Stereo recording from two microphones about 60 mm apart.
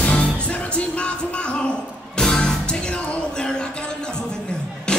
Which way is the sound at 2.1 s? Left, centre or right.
Centre.